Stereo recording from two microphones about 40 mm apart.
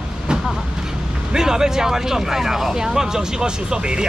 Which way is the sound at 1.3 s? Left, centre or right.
Centre.